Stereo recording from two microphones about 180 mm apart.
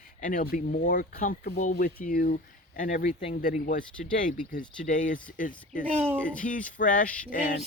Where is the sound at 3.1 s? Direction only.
30° left (ahead or behind).